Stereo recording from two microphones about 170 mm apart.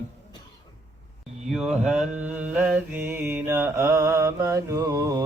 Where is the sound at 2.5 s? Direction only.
10° right (ahead or behind).